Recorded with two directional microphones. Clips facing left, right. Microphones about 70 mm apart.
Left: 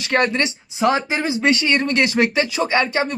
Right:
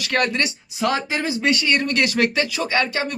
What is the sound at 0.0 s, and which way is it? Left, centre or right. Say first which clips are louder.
Speech: left 3 dB; left.